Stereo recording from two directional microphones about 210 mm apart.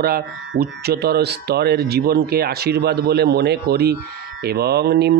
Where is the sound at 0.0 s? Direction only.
45° right (ahead or behind).